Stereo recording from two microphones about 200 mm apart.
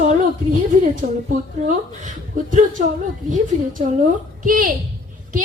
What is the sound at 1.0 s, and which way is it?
Speech, 40° right (ahead or behind).